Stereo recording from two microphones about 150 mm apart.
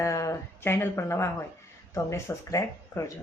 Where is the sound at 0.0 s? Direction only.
20° left (ahead or behind).